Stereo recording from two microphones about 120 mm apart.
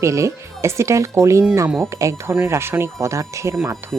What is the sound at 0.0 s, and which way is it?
Speech, 25° right (ahead or behind).